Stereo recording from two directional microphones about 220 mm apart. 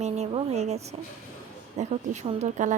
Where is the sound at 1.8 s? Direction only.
30° right (ahead or behind).